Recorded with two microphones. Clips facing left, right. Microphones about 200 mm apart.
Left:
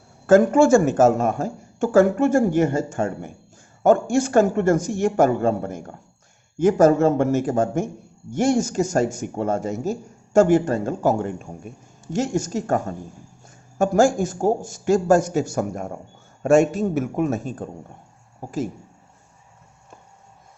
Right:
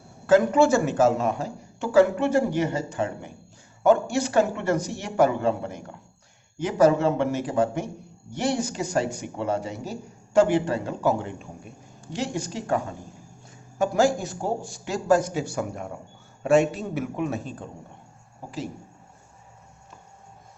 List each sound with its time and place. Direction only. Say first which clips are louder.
0.3 s a man's voice: left 4 dB; 50° left (ahead or behind)